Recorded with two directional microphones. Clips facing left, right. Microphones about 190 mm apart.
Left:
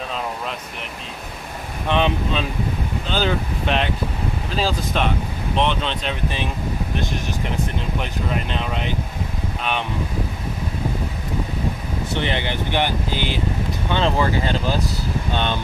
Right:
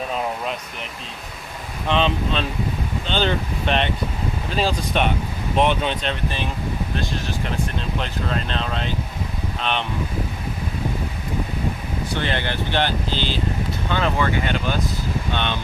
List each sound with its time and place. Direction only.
1.9 s speech: 15° left (ahead or behind); by 6.0 s 10° right (ahead or behind)
6.9 s speech: 15° left (ahead or behind)
12.1 s speech: 15° left (ahead or behind)
13.9 s speech: 30° left (ahead or behind)